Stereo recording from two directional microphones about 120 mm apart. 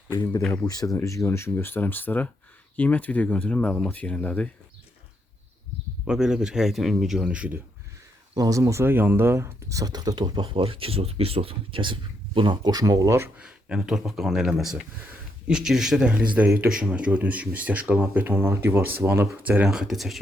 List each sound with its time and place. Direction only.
0.6 s speech: 30° left (ahead or behind); by 4.4 s 10° left (ahead or behind)
6.1 s speech: 5° right (ahead or behind)
8.4 s speech: 30° right (ahead or behind)
13.3 s speech: 5° right (ahead or behind); by 19.5 s 20° right (ahead or behind)
19.5 s speech: 10° right (ahead or behind)